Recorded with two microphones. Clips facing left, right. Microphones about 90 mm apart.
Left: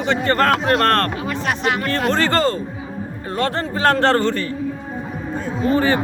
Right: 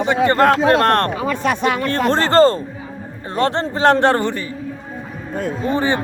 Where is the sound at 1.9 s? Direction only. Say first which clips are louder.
Right 2 dB; 35° right (ahead or behind); by 4.4 s 15° right (ahead or behind).